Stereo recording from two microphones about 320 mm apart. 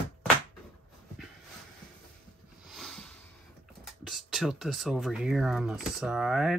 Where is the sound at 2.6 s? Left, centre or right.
Centre.